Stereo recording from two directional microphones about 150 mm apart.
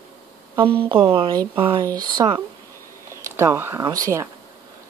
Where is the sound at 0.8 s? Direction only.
35° right (ahead or behind).